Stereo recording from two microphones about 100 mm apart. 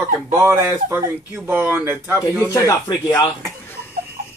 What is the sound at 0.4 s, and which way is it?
Speech, 25° right (ahead or behind).